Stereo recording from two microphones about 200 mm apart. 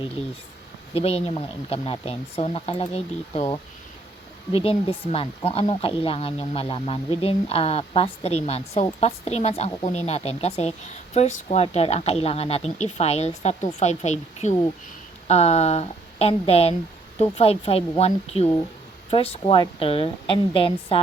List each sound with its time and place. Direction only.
0.9 s speech: 30° left (ahead or behind)
4.5 s speech: 25° left (ahead or behind)